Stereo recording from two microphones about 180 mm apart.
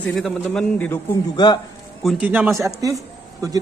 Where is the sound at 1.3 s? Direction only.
25° left (ahead or behind).